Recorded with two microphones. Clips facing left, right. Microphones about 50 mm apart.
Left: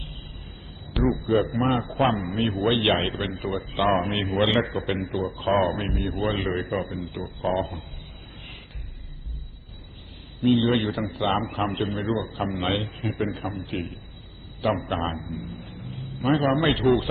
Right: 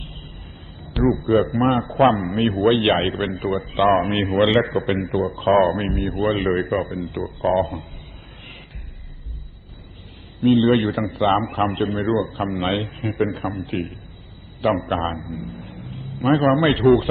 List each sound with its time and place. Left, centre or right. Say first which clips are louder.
0.9 s a man's voice: right 5 dB; centre
2.2 s a man's voice: right 6 dB; right
7.2 s a man's voice: right 6 dB; centre
7.6 s a man's voice: right 7 dB; right
10.4 s a man's voice: right 5 dB; right